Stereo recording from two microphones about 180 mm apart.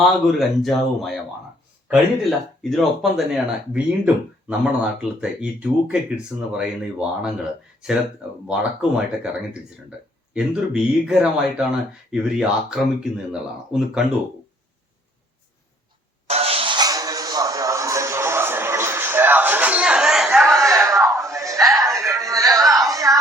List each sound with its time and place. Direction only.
0.0 s speech: centre (ahead or behind)
2.6 s speech: centre (ahead or behind)
8.4 s speech: 5° right (ahead or behind)
16.2 s music: 35° right (ahead or behind); by 20.6 s centre (ahead or behind)
20.6 s a sound: 15° right (ahead or behind)